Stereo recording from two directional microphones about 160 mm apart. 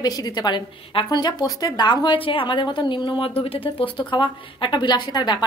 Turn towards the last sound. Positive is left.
turn(degrees=30)  # may be behind; listen again after turning